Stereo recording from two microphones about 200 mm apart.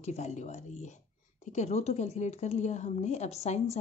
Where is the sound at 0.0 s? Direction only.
35° left (ahead or behind).